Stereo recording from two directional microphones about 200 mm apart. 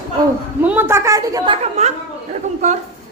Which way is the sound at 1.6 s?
35° right (ahead or behind).